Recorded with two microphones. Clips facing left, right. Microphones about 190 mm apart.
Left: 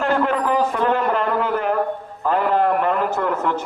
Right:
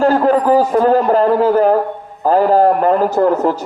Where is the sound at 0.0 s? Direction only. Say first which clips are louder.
Right 7 dB; 35° right (ahead or behind).